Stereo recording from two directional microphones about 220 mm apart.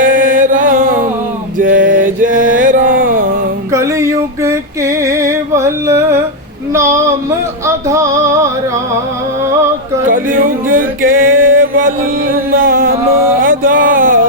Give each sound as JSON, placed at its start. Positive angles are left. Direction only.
{"t": 0.0, "sound": "music", "side_deg": -40}
{"t": 1.5, "sound": "male singing", "side_deg": -40}
{"t": 2.0, "sound": "mantra", "side_deg": -35}
{"t": 3.7, "sound": "a sound", "side_deg": -15}
{"t": 6.7, "sound": "music", "side_deg": -15}
{"t": 10.1, "sound": "music", "side_deg": -40}